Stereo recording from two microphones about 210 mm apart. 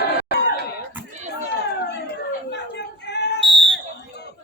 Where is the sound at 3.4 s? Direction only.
25° right (ahead or behind).